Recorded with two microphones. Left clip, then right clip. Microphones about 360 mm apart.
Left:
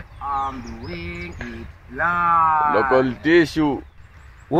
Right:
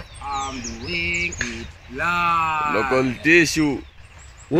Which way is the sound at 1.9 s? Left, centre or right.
Centre.